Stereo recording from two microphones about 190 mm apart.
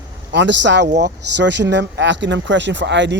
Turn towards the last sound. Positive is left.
turn(degrees=-70)  # may be behind; listen again after turning